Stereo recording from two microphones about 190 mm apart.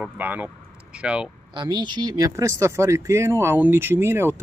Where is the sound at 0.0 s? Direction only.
10° right (ahead or behind).